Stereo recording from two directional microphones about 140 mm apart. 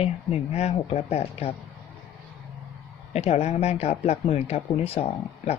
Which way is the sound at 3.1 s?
50° left (ahead or behind).